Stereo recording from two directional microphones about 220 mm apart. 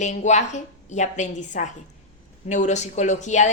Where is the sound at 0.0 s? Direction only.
35° left (ahead or behind).